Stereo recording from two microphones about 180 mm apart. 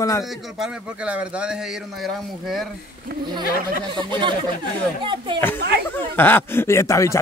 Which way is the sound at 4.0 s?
25° right (ahead or behind).